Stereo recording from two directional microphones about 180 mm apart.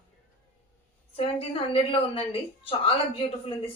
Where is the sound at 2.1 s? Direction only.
30° left (ahead or behind).